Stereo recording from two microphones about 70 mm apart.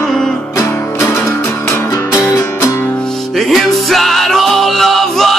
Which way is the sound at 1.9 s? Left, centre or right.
Left.